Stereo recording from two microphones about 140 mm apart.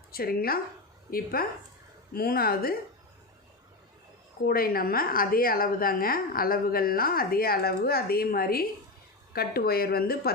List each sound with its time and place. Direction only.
0.1 s a woman's voice: 90° left
4.4 s a woman's voice: 90° left